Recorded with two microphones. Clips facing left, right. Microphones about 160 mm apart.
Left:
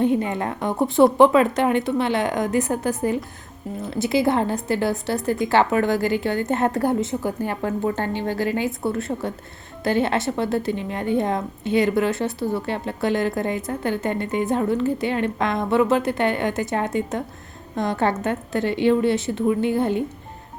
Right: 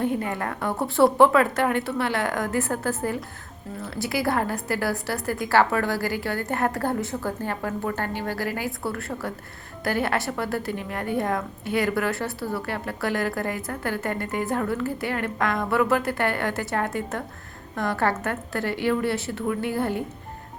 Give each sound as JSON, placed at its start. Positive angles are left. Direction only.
{"t": 0.0, "sound": "a woman's voice", "side_deg": 20}